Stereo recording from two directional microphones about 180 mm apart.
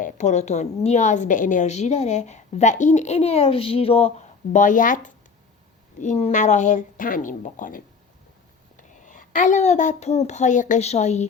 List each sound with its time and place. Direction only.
0.0 s a woman's voice: 40° left (ahead or behind)
4.5 s a woman's voice: 45° left (ahead or behind)